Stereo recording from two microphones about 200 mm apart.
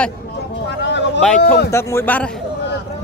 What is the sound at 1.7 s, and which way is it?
Speech, 10° left (ahead or behind).